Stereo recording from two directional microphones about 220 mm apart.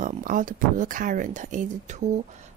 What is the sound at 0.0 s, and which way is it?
Speech, 35° right (ahead or behind).